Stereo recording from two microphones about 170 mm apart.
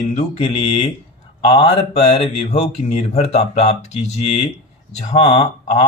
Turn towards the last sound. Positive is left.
turn(degrees=40)  # may be behind; listen again after turning